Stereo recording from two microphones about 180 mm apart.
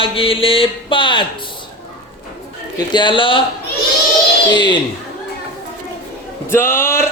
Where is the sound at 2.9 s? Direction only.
25° left (ahead or behind).